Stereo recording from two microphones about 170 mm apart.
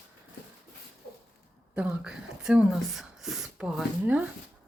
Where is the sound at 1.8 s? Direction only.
5° right (ahead or behind).